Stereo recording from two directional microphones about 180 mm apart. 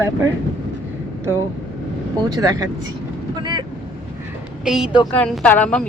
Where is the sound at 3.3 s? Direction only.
25° right (ahead or behind).